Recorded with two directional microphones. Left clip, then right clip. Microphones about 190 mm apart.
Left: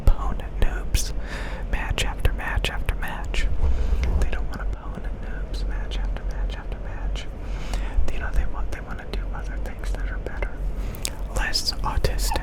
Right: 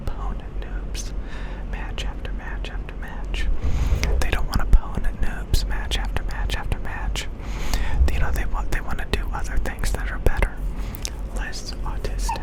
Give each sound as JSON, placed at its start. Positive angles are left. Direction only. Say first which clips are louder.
{"t": 0.0, "sound": "whispering", "louder": "left 4 dB", "side_deg": 15}
{"t": 3.8, "sound": "whispering", "louder": "right 7 dB", "side_deg": -20}
{"t": 7.7, "sound": "whispering", "louder": "right 6 dB", "side_deg": -10}
{"t": 11.3, "sound": "whispering", "louder": "left 12 dB", "side_deg": 20}